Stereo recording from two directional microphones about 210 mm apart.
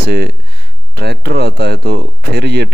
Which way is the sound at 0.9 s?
50° right (ahead or behind).